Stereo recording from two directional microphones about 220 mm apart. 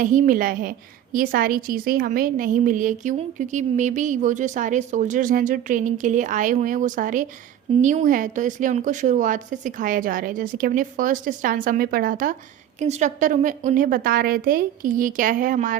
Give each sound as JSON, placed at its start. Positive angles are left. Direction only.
{"t": 0.0, "sound": "a woman's voice", "side_deg": -35}